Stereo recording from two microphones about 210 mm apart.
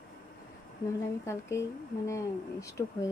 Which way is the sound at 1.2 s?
15° left (ahead or behind).